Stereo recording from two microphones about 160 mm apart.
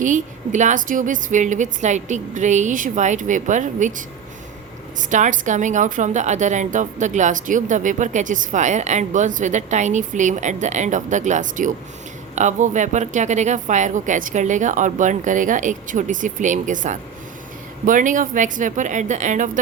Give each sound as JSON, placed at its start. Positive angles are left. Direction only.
{"t": 0.0, "sound": "a woman's voice", "side_deg": -50}